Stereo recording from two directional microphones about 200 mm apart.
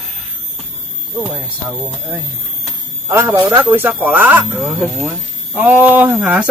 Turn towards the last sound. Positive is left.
turn(degrees=-5)  # may be behind; listen again after turning